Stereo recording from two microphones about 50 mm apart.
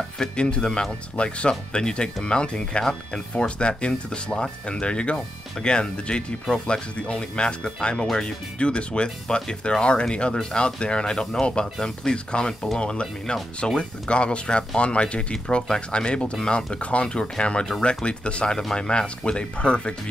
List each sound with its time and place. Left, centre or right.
0.2 s speech: centre